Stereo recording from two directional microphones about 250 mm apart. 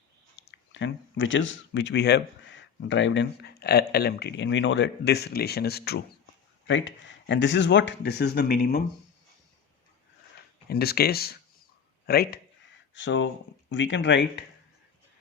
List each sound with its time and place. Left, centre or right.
0.3 s speech: left
10.7 s speech: left